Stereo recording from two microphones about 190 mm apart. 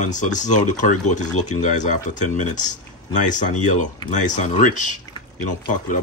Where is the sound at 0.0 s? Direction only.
40° left (ahead or behind).